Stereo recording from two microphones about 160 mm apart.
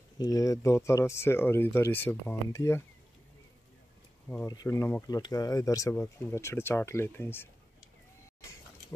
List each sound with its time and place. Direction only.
0.2 s speech: 20° left (ahead or behind)
4.3 s speech: 10° left (ahead or behind)